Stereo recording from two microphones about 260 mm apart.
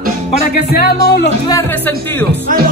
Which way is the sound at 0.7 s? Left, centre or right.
Left.